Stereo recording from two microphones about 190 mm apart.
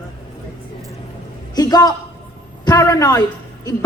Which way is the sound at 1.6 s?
20° left (ahead or behind).